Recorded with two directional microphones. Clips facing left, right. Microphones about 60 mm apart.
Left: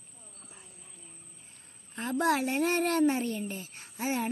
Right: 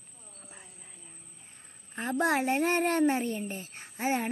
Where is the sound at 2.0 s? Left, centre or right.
Right.